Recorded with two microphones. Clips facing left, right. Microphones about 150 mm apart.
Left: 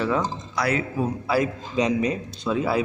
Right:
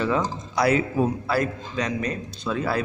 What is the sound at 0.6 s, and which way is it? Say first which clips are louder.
Speech: right 4 dB; 25° right (ahead or behind).